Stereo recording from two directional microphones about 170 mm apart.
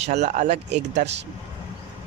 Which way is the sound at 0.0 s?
40° right (ahead or behind).